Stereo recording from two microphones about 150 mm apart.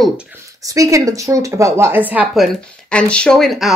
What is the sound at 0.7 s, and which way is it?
Speech, 20° right (ahead or behind).